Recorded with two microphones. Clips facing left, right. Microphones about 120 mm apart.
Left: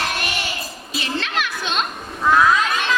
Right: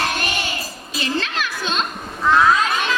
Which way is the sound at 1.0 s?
35° right (ahead or behind).